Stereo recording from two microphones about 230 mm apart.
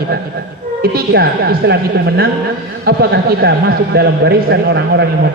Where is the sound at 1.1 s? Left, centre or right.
Right.